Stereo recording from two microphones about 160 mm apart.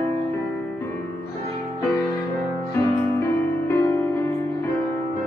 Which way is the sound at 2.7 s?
15° left (ahead or behind).